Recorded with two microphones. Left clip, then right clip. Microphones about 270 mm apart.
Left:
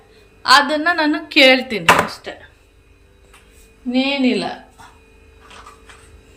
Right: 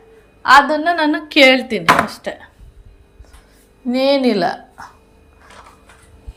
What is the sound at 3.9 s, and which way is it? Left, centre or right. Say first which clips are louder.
Speech: right 4 dB; right.